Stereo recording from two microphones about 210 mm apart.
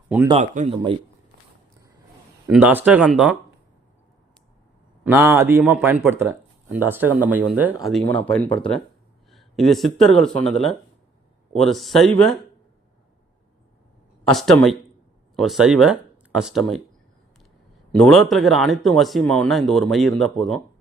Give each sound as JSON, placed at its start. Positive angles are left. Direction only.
{"t": 0.3, "sound": "speech", "side_deg": -35}
{"t": 2.5, "sound": "speech", "side_deg": -5}
{"t": 5.0, "sound": "speech", "side_deg": -10}
{"t": 14.3, "sound": "speech", "side_deg": 0}
{"t": 17.9, "sound": "speech", "side_deg": 0}